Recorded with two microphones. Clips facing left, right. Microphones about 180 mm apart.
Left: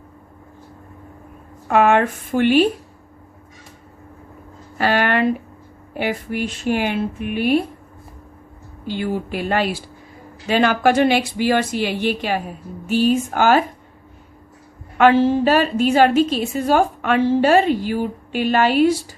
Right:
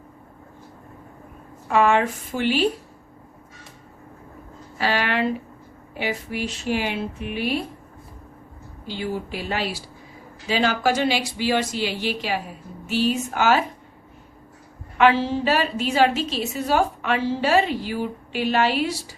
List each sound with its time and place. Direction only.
1.6 s speech: 55° left (ahead or behind)
4.8 s speech: 55° left (ahead or behind)
8.9 s a woman's voice: 55° left (ahead or behind)
14.9 s a woman's voice: 50° left (ahead or behind)